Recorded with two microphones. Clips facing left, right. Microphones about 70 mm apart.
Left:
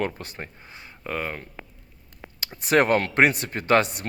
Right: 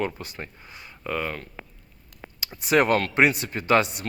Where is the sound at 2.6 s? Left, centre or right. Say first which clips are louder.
Left 1 dB; left.